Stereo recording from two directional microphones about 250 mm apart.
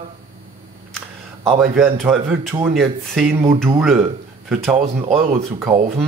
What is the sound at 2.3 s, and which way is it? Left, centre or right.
Speech, centre.